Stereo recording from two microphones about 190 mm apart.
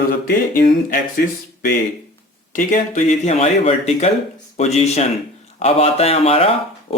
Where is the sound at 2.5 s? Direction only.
40° left (ahead or behind).